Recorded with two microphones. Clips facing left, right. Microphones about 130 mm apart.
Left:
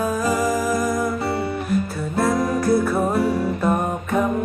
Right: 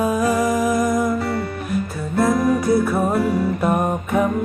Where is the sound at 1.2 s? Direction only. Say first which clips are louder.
Even; 25° left (ahead or behind).